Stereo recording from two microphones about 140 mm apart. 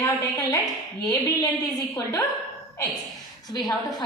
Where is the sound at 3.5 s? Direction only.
25° left (ahead or behind).